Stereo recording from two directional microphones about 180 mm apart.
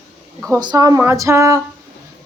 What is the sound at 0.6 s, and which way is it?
A woman's voice, 20° right (ahead or behind).